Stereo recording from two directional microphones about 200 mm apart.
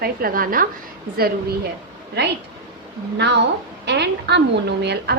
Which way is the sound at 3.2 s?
60° right (ahead or behind).